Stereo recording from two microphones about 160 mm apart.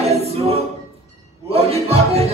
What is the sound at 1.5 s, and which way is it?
Speech, 40° right (ahead or behind).